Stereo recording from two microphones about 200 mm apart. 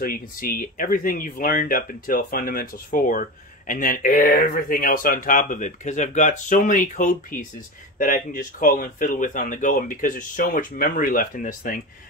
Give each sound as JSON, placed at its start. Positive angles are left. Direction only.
{"t": 0.0, "sound": "speech", "side_deg": 45}